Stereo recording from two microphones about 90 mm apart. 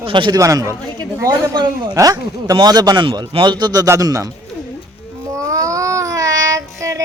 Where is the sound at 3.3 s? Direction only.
60° right (ahead or behind).